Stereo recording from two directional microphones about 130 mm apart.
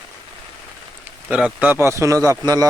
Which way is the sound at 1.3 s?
10° right (ahead or behind).